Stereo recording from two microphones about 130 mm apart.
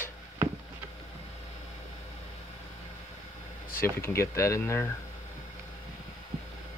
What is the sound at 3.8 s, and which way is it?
Speech, 20° left (ahead or behind).